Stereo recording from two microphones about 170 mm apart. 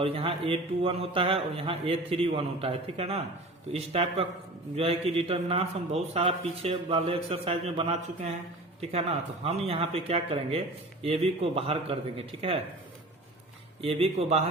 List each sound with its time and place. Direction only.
0.0 s a man's voice: 35° right (ahead or behind)
13.8 s a man's voice: 35° right (ahead or behind)